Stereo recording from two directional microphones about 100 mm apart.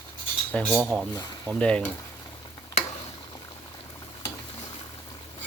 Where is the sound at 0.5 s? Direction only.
10° left (ahead or behind).